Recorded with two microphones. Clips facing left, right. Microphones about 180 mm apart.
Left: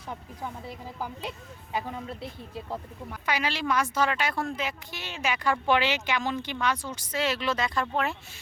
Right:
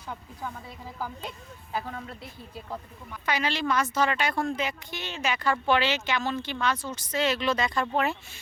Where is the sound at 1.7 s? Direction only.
20° left (ahead or behind).